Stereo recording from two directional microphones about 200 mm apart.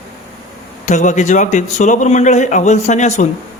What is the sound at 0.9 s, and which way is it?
Speech, 35° left (ahead or behind).